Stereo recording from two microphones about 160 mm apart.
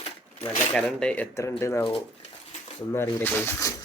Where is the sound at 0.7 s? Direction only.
5° left (ahead or behind).